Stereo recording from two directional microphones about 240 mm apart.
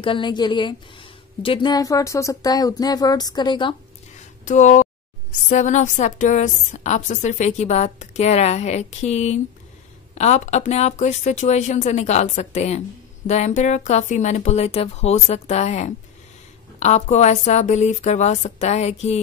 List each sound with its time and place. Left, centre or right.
0.0 s a woman's voice: centre
4.5 s a woman's voice: left